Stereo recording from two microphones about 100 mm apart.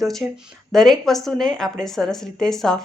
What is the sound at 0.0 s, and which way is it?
Speech, centre (ahead or behind).